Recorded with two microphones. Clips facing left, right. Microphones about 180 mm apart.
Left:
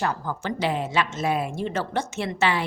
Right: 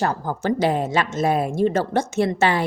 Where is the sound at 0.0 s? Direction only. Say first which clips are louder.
Right 5 dB; 40° right (ahead or behind).